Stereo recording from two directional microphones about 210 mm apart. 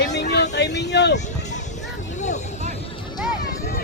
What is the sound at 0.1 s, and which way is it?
Vehicle, 55° left (ahead or behind).